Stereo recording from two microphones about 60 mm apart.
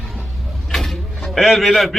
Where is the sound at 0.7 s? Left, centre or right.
Centre.